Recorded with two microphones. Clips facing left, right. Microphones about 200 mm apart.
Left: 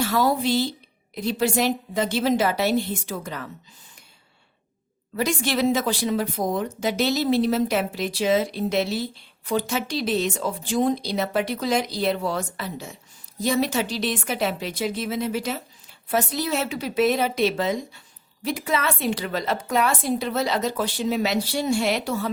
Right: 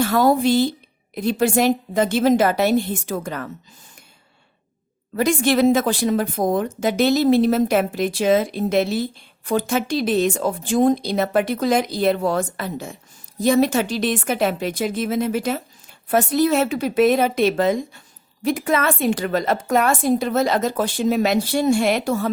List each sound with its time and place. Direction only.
0.0 s a woman's voice: 50° right (ahead or behind)
5.1 s a woman's voice: 50° right (ahead or behind)